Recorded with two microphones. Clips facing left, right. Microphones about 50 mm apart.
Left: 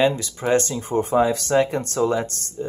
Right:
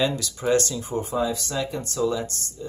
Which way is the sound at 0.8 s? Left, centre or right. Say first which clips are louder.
Left 6 dB; left.